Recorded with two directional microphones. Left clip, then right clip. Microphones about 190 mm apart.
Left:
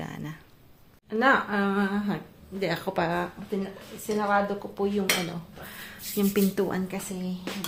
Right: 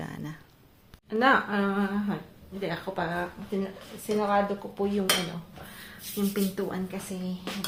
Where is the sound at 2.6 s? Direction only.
55° left (ahead or behind).